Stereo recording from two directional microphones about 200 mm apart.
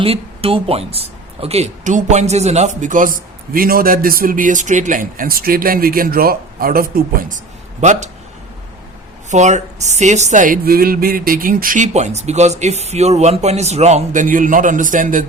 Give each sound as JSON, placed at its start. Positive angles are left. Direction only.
{"t": 0.0, "sound": "speech", "side_deg": -30}
{"t": 9.3, "sound": "speech", "side_deg": -35}